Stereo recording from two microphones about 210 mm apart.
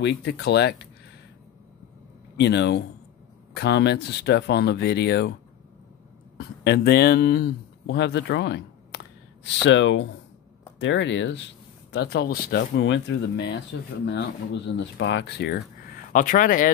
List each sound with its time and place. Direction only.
0.0 s speech: 55° left (ahead or behind)
2.3 s speech: 55° left (ahead or behind)
6.3 s speech: 50° left (ahead or behind)